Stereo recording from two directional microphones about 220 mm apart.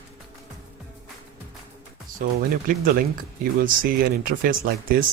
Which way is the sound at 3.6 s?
40° right (ahead or behind).